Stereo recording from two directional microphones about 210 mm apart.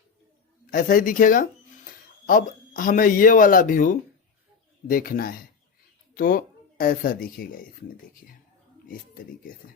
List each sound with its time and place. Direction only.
0.7 s speech: 40° left (ahead or behind)